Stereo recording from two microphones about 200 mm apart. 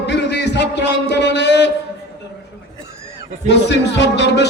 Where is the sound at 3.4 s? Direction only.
60° left (ahead or behind).